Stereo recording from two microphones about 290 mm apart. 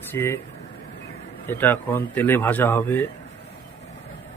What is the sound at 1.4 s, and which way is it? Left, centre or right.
A man's voice, centre.